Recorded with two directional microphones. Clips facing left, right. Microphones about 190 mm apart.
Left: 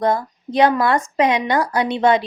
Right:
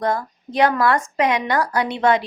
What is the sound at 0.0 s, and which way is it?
Speech, 25° left (ahead or behind).